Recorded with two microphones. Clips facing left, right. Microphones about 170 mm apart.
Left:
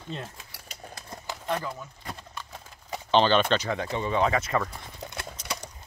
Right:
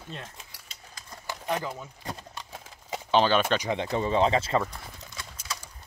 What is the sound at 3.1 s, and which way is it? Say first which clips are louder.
Speech: left 1 dB; 5° right (ahead or behind).